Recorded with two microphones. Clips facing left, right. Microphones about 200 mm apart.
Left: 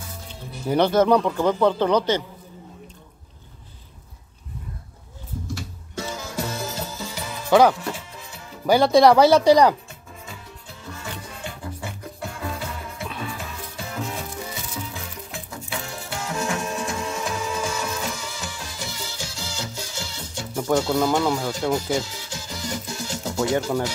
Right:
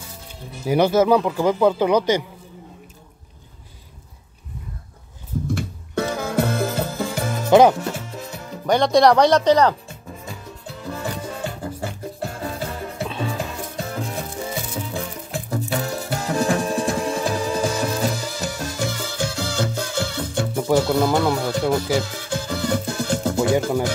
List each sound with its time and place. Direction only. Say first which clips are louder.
0.7 s speech: right 2 dB; 10° right (ahead or behind)
5.5 s music: right 8 dB; 60° right (ahead or behind)
7.4 s speech: right 3 dB; 20° right (ahead or behind)
7.7 s music: right 4 dB; 45° right (ahead or behind)
8.6 s speech: even; 5° left (ahead or behind)
11.0 s music: right 8 dB; 40° right (ahead or behind); by 20.4 s 55° right (ahead or behind)
20.5 s music: right 2 dB; 5° right (ahead or behind)
21.1 s music: right 2 dB; 60° right (ahead or behind)